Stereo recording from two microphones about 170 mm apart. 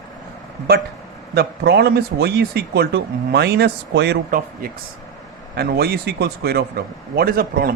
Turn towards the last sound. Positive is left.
turn(degrees=-60)  # may be behind; listen again after turning